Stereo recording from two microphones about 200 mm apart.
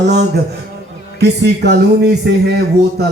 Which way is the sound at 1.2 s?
55° right (ahead or behind).